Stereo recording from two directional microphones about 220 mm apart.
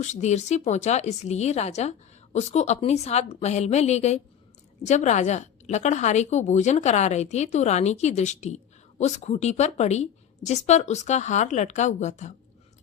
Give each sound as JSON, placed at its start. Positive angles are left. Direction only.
{"t": 0.0, "sound": "a woman's voice", "side_deg": 30}